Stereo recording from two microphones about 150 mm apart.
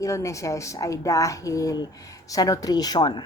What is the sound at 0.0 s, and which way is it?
Speech, 20° left (ahead or behind).